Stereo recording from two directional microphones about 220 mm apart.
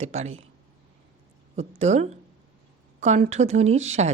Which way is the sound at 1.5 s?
30° right (ahead or behind).